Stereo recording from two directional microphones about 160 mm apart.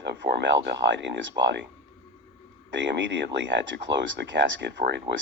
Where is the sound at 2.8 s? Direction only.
90° right.